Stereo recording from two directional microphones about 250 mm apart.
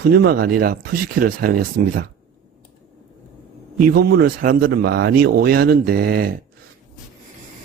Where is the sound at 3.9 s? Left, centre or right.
Right.